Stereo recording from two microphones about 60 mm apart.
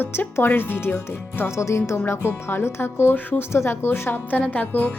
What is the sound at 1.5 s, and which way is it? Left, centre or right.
Speech, left.